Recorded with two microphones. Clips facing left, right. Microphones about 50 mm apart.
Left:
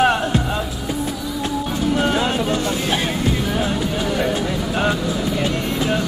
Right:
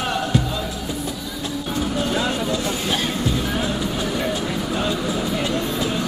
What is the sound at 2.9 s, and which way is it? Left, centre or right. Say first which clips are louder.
Music: even; centre.